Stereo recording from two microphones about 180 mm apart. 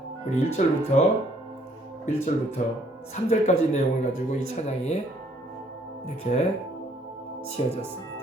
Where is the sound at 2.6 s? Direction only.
40° left (ahead or behind).